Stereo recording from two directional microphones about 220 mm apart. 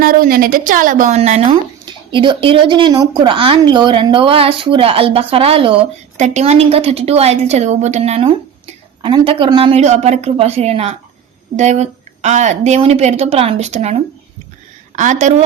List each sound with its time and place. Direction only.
0.0 s a woman's voice: 40° right (ahead or behind)